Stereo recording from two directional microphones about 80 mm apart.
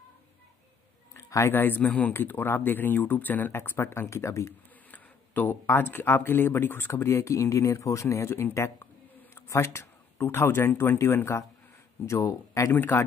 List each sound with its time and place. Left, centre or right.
1.1 s a sound: left
1.5 s speech: left
4.9 s speech: left
12.7 s speech: left